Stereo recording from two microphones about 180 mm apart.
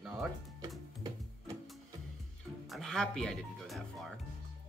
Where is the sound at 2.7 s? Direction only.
5° left (ahead or behind).